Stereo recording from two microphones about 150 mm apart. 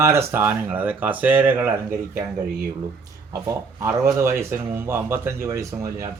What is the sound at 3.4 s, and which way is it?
Speech, 20° right (ahead or behind).